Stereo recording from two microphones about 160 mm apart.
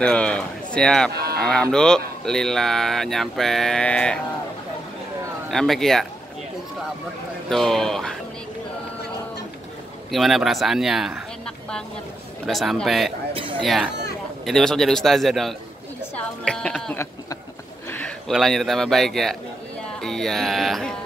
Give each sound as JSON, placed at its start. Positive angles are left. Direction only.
{"t": 0.0, "sound": "speech", "side_deg": 5}
{"t": 1.1, "sound": "a sound", "side_deg": -75}
{"t": 1.4, "sound": "speech", "side_deg": 5}
{"t": 5.5, "sound": "speech", "side_deg": 0}
{"t": 7.4, "sound": "speech", "side_deg": 5}
{"t": 10.1, "sound": "speech", "side_deg": 0}
{"t": 12.4, "sound": "speech", "side_deg": 0}
{"t": 13.3, "sound": "speech", "side_deg": -35}
{"t": 13.6, "sound": "speech", "side_deg": 0}
{"t": 16.2, "sound": "a sound", "side_deg": 5}
{"t": 18.3, "sound": "speech", "side_deg": 0}